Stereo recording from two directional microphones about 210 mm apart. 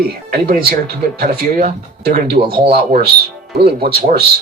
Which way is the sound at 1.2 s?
45° right (ahead or behind).